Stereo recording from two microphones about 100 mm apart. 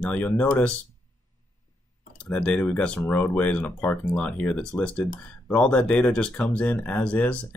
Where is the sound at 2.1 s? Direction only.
10° left (ahead or behind).